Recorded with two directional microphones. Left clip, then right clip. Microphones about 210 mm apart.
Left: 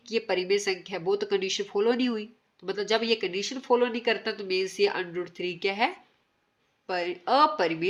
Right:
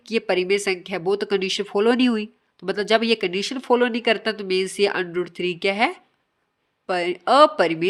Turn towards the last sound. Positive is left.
turn(degrees=-45)  # may be behind; listen again after turning